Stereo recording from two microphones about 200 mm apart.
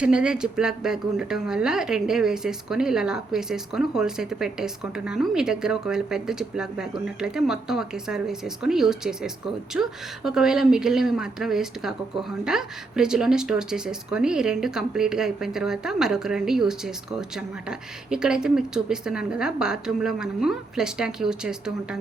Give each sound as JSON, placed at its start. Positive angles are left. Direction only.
{"t": 0.0, "sound": "a woman's voice", "side_deg": -5}